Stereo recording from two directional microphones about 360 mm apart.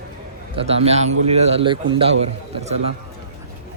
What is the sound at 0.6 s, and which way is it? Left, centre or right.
A man's voice, centre.